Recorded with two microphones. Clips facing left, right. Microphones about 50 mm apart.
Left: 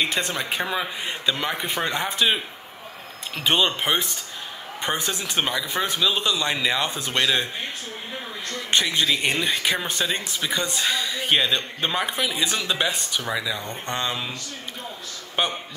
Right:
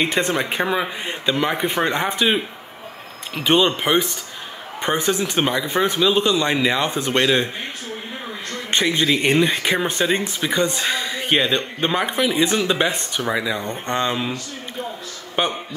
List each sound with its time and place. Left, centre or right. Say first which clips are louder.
0.0 s speech: right 5 dB; right
3.3 s speech: right 4 dB; right
8.5 s speech: right 3 dB; right
13.6 s speech: right 5 dB; right
15.4 s speech: right 3 dB; centre